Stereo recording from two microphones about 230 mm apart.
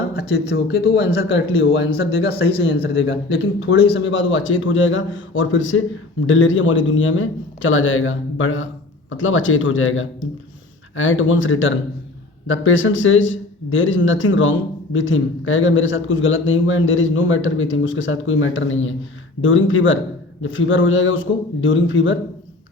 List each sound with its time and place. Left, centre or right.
0.2 s speech: left